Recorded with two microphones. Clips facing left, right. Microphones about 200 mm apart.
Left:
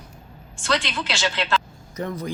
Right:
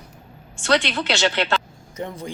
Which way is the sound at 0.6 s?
65° right (ahead or behind).